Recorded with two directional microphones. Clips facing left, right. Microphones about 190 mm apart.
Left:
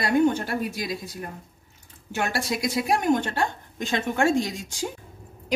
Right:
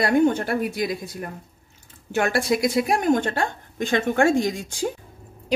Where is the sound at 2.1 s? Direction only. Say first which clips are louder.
Right 6 dB; 55° right (ahead or behind).